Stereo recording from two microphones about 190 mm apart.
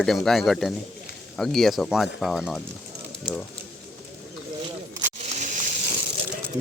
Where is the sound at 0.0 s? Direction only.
Centre (ahead or behind).